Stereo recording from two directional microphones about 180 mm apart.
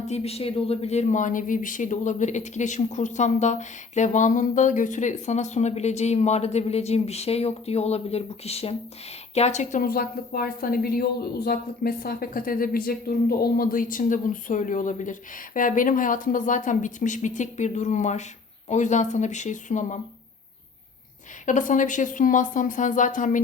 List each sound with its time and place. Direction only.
0.1 s a woman's voice: 35° left (ahead or behind)
21.4 s speech: 45° left (ahead or behind)